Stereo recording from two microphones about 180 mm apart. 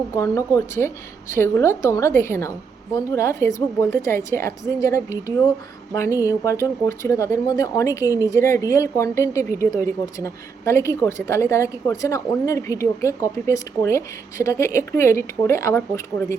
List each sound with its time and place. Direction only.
0.2 s a woman's voice: 15° left (ahead or behind)